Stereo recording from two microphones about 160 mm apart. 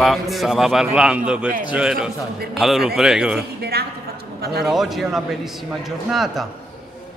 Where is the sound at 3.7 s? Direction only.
75° right (ahead or behind).